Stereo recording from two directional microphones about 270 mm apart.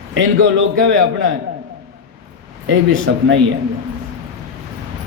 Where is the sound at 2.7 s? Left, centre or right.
Right.